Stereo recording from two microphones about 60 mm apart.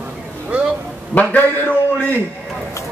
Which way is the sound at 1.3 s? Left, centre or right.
Left.